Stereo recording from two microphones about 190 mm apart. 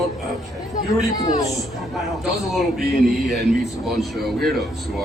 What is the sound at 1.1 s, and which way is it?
Speech, 20° left (ahead or behind).